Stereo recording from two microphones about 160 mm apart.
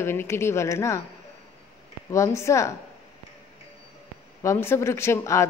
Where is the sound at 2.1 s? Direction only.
20° left (ahead or behind).